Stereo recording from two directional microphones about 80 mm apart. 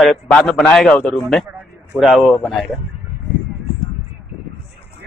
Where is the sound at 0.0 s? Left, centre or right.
Centre.